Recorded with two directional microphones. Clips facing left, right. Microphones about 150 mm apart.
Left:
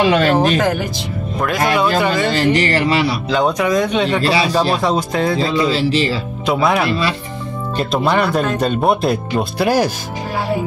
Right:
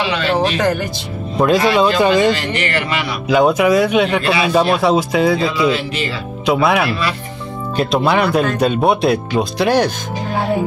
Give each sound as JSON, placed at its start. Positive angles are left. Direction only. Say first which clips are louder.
{"t": 0.0, "sound": "speech", "louder": "left 4 dB", "side_deg": 45}
{"t": 0.6, "sound": "speech", "louder": "even", "side_deg": 5}
{"t": 1.8, "sound": "speech", "louder": "right 3 dB", "side_deg": -20}
{"t": 2.3, "sound": "speech", "louder": "left 5 dB", "side_deg": 35}
{"t": 3.3, "sound": "speech", "louder": "right 8 dB", "side_deg": -10}
{"t": 4.2, "sound": "speech", "louder": "left 1 dB", "side_deg": 35}
{"t": 4.7, "sound": "speech", "louder": "right 3 dB", "side_deg": -5}
{"t": 5.4, "sound": "speech", "louder": "even", "side_deg": 35}
{"t": 6.4, "sound": "speech", "louder": "right 2 dB", "side_deg": 0}
{"t": 6.9, "sound": "speech", "louder": "left 2 dB", "side_deg": 30}
{"t": 7.7, "sound": "speech", "louder": "right 1 dB", "side_deg": 0}